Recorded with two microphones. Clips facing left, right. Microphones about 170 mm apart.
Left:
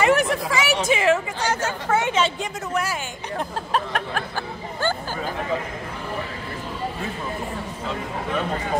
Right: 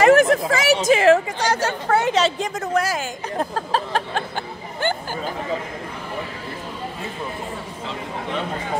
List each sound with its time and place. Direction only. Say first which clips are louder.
0.0 s speech: right 6 dB; 45° right (ahead or behind)